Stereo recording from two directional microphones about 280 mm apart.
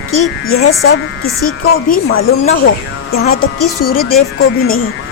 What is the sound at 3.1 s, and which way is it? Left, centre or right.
Speech, left.